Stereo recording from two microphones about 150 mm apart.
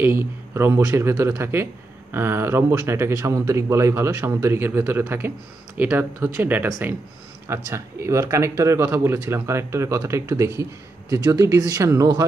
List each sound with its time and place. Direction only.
0.0 s speech: 15° right (ahead or behind)